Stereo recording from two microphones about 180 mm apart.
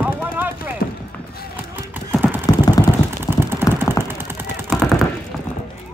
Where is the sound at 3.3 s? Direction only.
15° right (ahead or behind).